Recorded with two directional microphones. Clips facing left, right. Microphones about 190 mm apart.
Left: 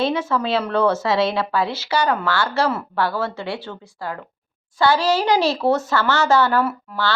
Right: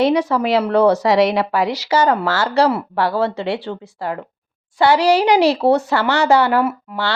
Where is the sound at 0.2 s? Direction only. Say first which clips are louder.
Right 5 dB; 35° right (ahead or behind).